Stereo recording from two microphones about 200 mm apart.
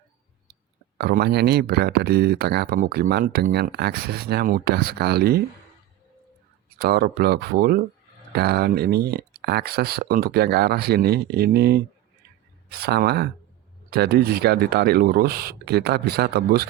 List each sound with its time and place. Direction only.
0.9 s speech: 55° right (ahead or behind)
6.7 s speech: 50° right (ahead or behind)